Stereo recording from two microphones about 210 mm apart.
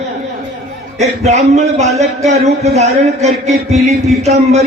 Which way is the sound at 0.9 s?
30° right (ahead or behind).